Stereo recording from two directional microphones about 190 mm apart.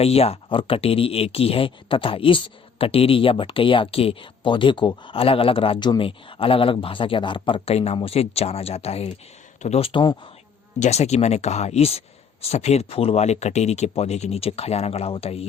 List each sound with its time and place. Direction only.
0.0 s speech: 30° left (ahead or behind)